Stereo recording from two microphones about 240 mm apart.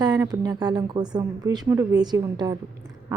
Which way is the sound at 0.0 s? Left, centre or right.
Centre.